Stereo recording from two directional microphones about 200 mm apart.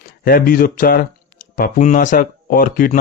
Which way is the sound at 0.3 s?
45° left (ahead or behind).